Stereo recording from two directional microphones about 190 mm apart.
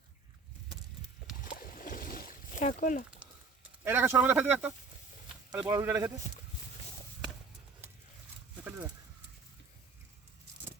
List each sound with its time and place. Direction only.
1.4 s boat: 50° left (ahead or behind)
3.2 s a sound: 5° right (ahead or behind)
3.8 s speech: 10° right (ahead or behind)
8.6 s horse: 10° right (ahead or behind)